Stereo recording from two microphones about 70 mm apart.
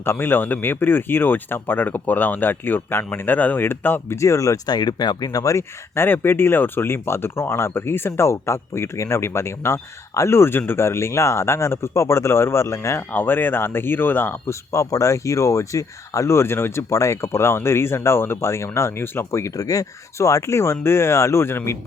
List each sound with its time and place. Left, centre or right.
0.0 s speech: left
4.2 s speech: left
13.1 s speech: left
14.7 s speech: left
19.5 s speech: left